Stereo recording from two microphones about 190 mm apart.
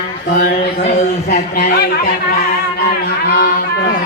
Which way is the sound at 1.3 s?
50° left (ahead or behind).